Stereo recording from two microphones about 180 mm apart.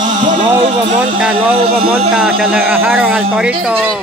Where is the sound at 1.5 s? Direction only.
30° right (ahead or behind).